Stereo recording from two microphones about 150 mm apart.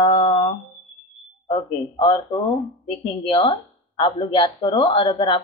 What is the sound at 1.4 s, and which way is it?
Speech, 35° left (ahead or behind).